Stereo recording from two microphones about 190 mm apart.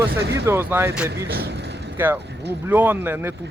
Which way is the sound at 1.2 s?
60° right (ahead or behind).